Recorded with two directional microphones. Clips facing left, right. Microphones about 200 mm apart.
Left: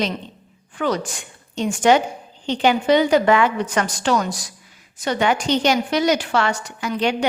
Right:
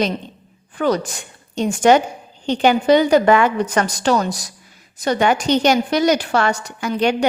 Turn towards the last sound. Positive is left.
turn(degrees=-45)  # may be behind; listen again after turning